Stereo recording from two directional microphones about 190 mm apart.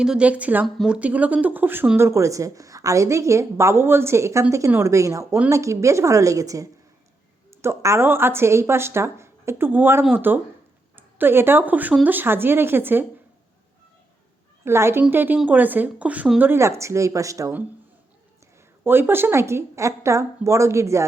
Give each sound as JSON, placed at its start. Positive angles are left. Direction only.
{"t": 0.0, "sound": "speech", "side_deg": -5}
{"t": 14.6, "sound": "speech", "side_deg": -15}
{"t": 18.9, "sound": "speech", "side_deg": -10}